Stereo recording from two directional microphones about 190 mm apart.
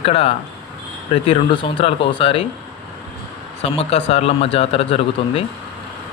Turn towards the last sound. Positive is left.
turn(degrees=30)  # may be behind; listen again after turning